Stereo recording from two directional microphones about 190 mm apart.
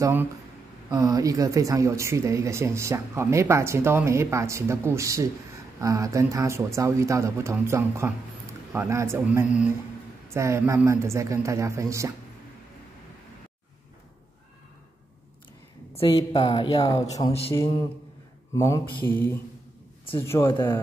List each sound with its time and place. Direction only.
0.0 s speech: 10° right (ahead or behind)
16.3 s speech: 25° left (ahead or behind)
17.3 s a man's voice: 30° left (ahead or behind)
18.5 s a sound: 15° left (ahead or behind)
19.0 s speech: 10° left (ahead or behind)